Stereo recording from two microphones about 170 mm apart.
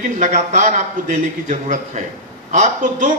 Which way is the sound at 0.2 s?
45° right (ahead or behind).